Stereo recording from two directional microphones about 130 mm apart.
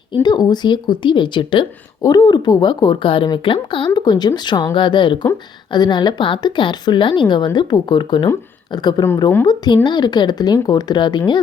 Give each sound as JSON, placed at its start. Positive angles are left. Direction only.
{"t": 0.1, "sound": "a woman's voice", "side_deg": 35}